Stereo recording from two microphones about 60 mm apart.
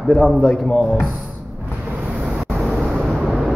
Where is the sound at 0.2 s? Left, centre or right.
Centre.